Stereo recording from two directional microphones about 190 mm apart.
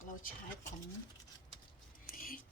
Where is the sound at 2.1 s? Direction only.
50° left (ahead or behind).